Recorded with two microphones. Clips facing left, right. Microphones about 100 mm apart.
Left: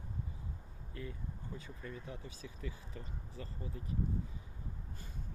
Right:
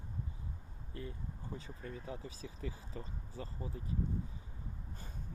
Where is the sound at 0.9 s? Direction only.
30° right (ahead or behind).